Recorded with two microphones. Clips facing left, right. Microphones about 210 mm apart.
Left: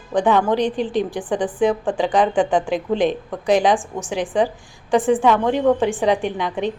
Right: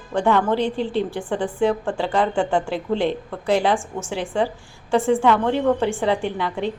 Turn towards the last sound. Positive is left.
turn(degrees=15)  # may be behind; listen again after turning